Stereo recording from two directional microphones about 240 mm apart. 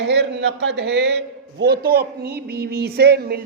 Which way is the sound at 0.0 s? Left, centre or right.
Right.